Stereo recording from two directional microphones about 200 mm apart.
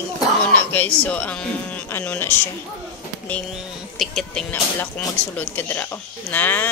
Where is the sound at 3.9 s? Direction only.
Centre (ahead or behind).